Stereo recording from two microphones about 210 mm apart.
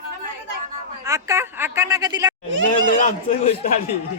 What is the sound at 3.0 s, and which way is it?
Speech, 35° left (ahead or behind).